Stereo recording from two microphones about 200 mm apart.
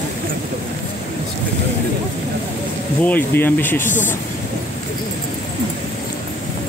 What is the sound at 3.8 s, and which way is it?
Speech, 40° left (ahead or behind).